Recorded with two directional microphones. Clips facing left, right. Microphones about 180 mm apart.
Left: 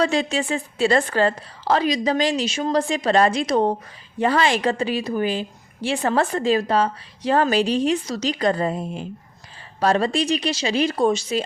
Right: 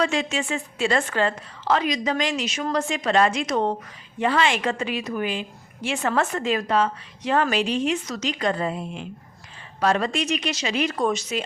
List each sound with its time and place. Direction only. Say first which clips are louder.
0.0 s a woman's voice: left 3 dB; 35° left (ahead or behind)